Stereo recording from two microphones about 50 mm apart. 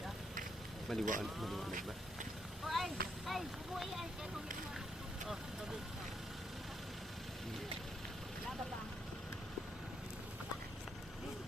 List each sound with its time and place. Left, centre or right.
0.9 s speech: centre
2.6 s speech: centre